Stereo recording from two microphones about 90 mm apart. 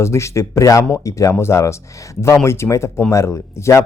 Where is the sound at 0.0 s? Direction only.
35° left (ahead or behind).